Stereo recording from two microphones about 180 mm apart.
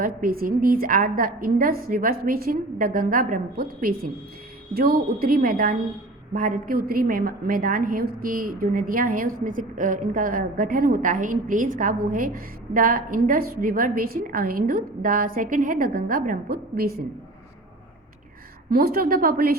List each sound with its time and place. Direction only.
0.0 s a woman's voice: 55° right (ahead or behind)
18.7 s a woman's voice: 55° right (ahead or behind)